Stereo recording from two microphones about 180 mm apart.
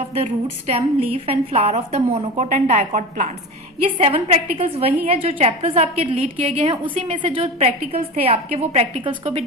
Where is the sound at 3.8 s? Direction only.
30° right (ahead or behind).